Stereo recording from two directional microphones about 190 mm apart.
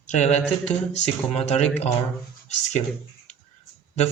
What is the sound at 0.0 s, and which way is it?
Speech, 35° left (ahead or behind).